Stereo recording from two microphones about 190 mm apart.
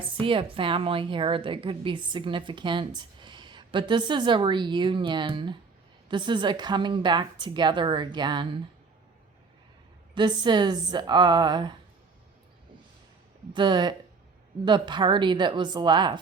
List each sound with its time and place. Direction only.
0.0 s a woman's voice: 25° right (ahead or behind)
10.2 s a woman's voice: 25° right (ahead or behind)
13.5 s a woman's voice: 25° right (ahead or behind)